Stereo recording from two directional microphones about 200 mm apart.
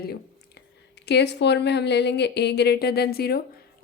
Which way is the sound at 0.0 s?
55° left (ahead or behind).